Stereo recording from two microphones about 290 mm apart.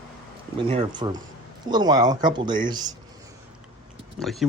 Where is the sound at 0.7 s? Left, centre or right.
Centre.